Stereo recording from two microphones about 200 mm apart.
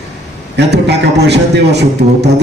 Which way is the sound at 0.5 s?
60° right (ahead or behind).